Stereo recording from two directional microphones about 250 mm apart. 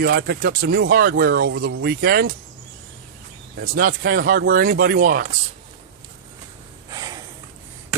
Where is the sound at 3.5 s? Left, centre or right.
Right.